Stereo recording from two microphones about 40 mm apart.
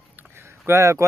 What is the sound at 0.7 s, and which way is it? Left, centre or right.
Speech, right.